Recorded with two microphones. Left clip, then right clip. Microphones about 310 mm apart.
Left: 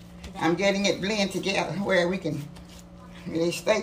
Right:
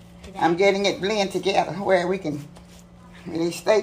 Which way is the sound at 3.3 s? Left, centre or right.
Centre.